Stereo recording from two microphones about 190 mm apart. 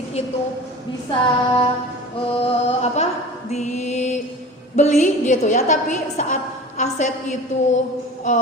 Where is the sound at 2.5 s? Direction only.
35° left (ahead or behind).